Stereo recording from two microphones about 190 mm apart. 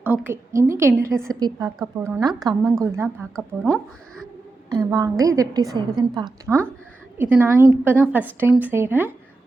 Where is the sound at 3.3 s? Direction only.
Centre (ahead or behind).